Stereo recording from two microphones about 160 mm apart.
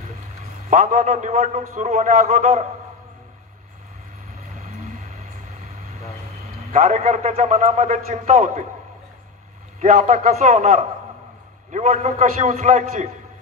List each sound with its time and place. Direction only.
0.7 s a man's voice: 50° right (ahead or behind)
6.7 s a man's voice: 45° right (ahead or behind)
9.8 s a man's voice: 45° right (ahead or behind)